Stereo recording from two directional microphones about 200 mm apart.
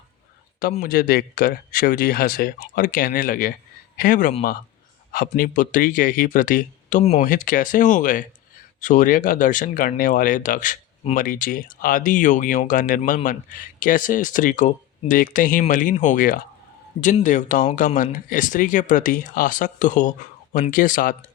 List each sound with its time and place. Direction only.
0.7 s speech: 45° left (ahead or behind)